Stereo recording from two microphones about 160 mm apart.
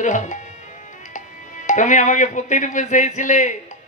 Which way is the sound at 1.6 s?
50° left (ahead or behind).